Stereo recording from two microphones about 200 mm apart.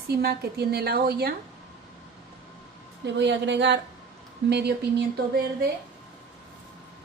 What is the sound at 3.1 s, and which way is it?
A woman's voice, 60° right (ahead or behind).